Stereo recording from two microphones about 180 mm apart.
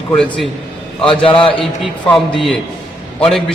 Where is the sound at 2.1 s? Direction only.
Centre (ahead or behind).